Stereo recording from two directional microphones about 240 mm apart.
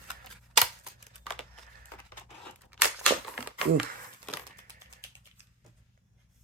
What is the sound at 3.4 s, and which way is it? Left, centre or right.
Crumpling, centre.